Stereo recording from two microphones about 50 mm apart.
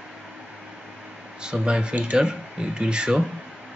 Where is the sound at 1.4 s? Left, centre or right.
Centre.